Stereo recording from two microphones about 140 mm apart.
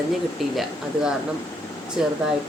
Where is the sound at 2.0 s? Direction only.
5° right (ahead or behind).